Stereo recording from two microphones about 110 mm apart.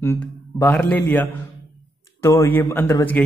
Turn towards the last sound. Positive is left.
turn(degrees=15)  # may be behind; listen again after turning